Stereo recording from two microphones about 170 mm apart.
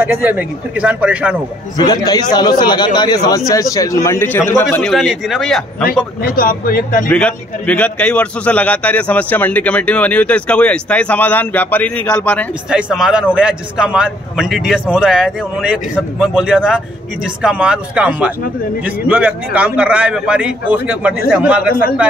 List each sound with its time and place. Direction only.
0.1 s a man's voice: 10° right (ahead or behind)
1.8 s a man's voice: 25° left (ahead or behind); by 5.6 s 5° left (ahead or behind)
6.2 s speech: 55° left (ahead or behind)
7.1 s a man's voice: 5° left (ahead or behind)
12.6 s a man's voice: 5° right (ahead or behind)